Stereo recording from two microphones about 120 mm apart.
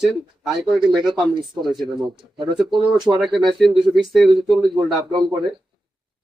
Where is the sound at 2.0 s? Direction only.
40° right (ahead or behind).